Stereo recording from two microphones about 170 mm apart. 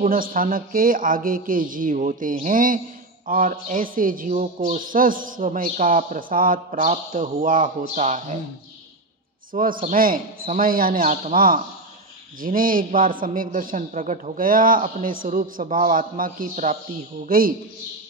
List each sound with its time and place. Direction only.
0.0 s a man's voice: 55° right (ahead or behind)
9.5 s a man's voice: 55° right (ahead or behind)